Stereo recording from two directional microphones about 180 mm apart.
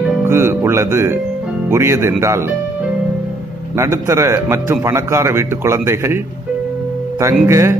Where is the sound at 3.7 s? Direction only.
15° right (ahead or behind).